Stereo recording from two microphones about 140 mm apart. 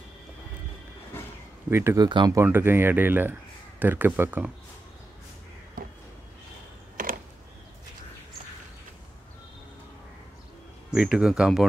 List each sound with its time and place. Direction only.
1.7 s speech: 20° right (ahead or behind)
2.0 s speech: 30° right (ahead or behind)
2.4 s speech: 15° right (ahead or behind)
5.8 s a sound: 90° right
7.0 s a sound: 85° right
10.9 s speech: 5° right (ahead or behind)